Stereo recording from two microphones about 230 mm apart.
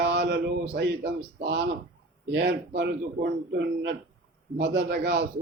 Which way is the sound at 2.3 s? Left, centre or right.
Right.